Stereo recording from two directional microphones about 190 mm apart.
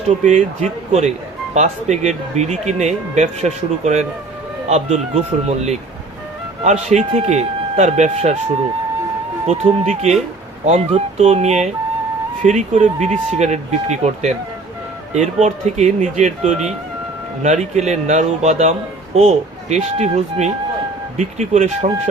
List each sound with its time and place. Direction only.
0.1 s speech: 35° right (ahead or behind)
9.5 s speech: 35° right (ahead or behind)